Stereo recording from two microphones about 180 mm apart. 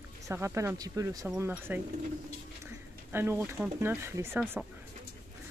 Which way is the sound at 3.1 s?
15° right (ahead or behind).